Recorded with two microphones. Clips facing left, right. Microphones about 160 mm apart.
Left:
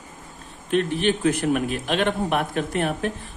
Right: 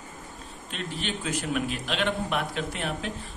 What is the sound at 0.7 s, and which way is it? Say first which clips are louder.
A man's voice: left 13 dB; 55° left (ahead or behind).